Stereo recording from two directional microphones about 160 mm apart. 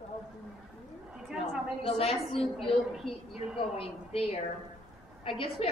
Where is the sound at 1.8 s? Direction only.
40° left (ahead or behind).